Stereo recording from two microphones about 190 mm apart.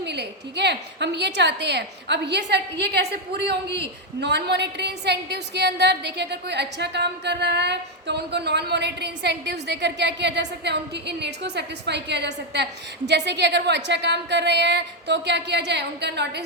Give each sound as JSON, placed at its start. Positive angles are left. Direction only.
{"t": 0.0, "sound": "a woman's voice", "side_deg": -65}